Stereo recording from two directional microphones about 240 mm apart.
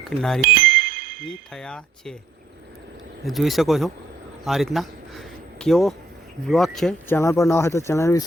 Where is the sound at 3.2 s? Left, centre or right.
Centre.